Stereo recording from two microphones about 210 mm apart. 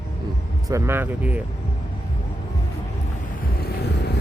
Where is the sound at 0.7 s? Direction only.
10° right (ahead or behind).